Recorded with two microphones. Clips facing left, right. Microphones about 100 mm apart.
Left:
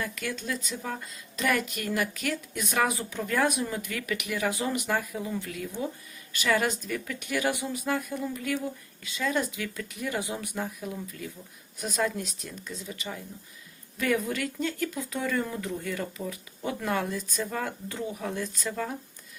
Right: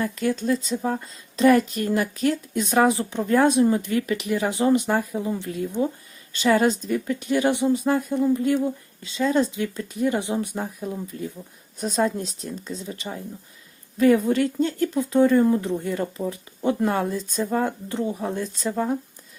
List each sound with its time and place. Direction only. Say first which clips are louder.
0.0 s speech: right 10 dB; 35° right (ahead or behind)